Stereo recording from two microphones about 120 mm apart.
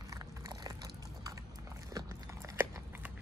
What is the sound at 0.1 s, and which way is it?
Biting, 30° right (ahead or behind).